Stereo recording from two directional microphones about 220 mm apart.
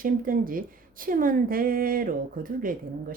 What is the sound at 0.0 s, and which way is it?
A woman's voice, 40° right (ahead or behind).